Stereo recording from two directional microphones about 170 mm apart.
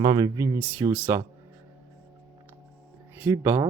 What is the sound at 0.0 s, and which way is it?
Speech, 25° right (ahead or behind).